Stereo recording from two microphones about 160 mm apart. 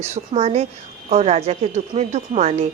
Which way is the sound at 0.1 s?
45° right (ahead or behind).